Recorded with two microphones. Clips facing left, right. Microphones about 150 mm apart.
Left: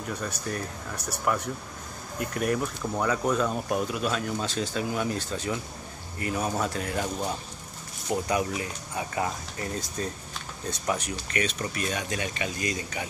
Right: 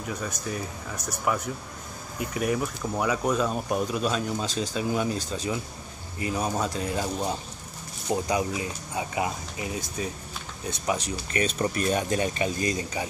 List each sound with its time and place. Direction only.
0.0 s speech: 5° right (ahead or behind)
0.9 s speech: 10° left (ahead or behind)
1.2 s speech: 5° right (ahead or behind)
11.3 s speech: 35° right (ahead or behind)